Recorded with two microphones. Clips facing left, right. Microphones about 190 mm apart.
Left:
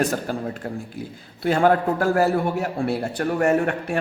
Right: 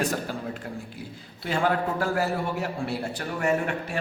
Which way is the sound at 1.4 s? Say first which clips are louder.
Left 7 dB; 50° left (ahead or behind).